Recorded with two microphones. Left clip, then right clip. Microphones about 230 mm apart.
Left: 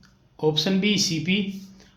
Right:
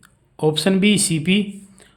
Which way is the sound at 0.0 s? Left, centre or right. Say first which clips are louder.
Right 4 dB; right.